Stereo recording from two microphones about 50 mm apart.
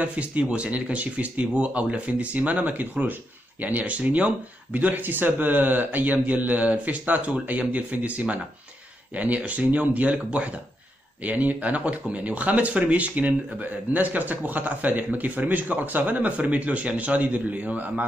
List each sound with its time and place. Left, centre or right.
0.0 s speech: right